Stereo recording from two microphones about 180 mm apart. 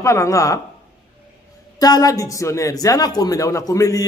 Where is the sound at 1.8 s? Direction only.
20° left (ahead or behind).